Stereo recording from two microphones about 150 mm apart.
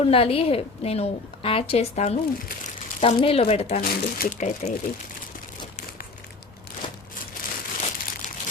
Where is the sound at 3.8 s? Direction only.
90° left.